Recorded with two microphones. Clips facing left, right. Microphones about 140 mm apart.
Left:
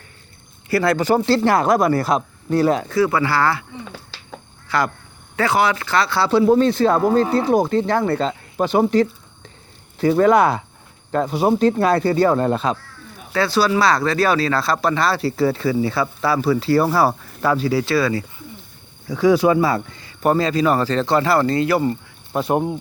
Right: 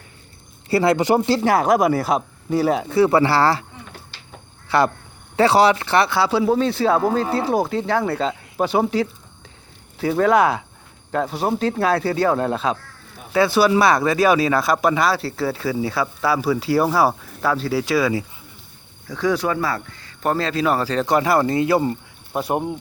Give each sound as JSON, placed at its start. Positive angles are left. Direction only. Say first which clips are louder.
{"t": 0.7, "sound": "speech", "louder": "right 1 dB", "side_deg": -20}
{"t": 2.9, "sound": "speech", "louder": "right 2 dB", "side_deg": -30}
{"t": 4.7, "sound": "speech", "louder": "right 3 dB", "side_deg": -25}
{"t": 6.1, "sound": "speech", "louder": "left 3 dB", "side_deg": -10}
{"t": 13.3, "sound": "speech", "louder": "right 2 dB", "side_deg": -15}
{"t": 15.2, "sound": "speech", "louder": "left 5 dB", "side_deg": 0}
{"t": 19.1, "sound": "speech", "louder": "left 6 dB", "side_deg": 10}
{"t": 22.3, "sound": "speech", "louder": "left 3 dB", "side_deg": -5}